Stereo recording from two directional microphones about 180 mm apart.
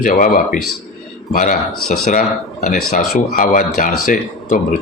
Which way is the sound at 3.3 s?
50° left (ahead or behind).